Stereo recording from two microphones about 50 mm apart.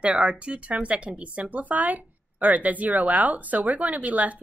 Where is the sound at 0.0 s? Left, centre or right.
Right.